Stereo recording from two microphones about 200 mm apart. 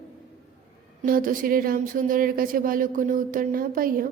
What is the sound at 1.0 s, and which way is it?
Speech, 45° right (ahead or behind).